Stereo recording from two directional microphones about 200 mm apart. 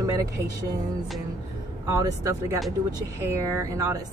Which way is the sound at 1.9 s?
15° right (ahead or behind).